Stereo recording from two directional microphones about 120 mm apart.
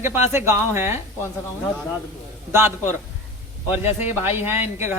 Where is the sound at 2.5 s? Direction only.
20° right (ahead or behind).